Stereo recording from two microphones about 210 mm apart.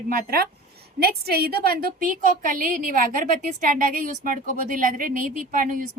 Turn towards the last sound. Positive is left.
turn(degrees=-40)  # may be behind; listen again after turning